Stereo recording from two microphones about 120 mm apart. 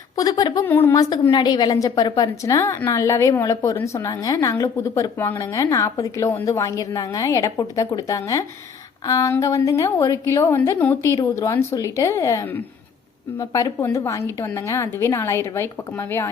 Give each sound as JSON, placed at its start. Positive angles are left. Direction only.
{"t": 0.2, "sound": "speech", "side_deg": 30}
{"t": 0.6, "sound": "a woman's voice", "side_deg": 20}
{"t": 1.3, "sound": "a woman's voice", "side_deg": 35}
{"t": 11.0, "sound": "a woman's voice", "side_deg": 25}